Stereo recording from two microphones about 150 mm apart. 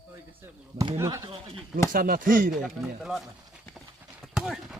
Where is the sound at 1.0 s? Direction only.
20° right (ahead or behind).